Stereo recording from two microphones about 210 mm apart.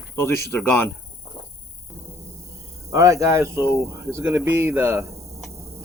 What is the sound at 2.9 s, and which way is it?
Speech, 15° right (ahead or behind).